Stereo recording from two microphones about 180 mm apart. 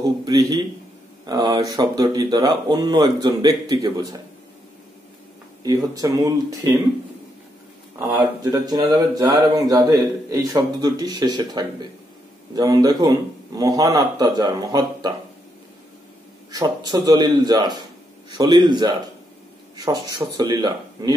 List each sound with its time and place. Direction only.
0.2 s speech: 20° right (ahead or behind)
5.6 s speech: 20° right (ahead or behind)
8.1 s speech: 15° right (ahead or behind)
16.5 s speech: 25° right (ahead or behind)